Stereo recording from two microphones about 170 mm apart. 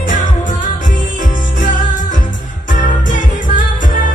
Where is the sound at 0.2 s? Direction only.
50° left (ahead or behind).